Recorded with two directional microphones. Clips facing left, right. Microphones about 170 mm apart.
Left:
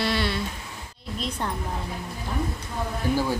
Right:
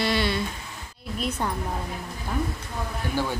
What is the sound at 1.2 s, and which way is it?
Speech, 5° right (ahead or behind).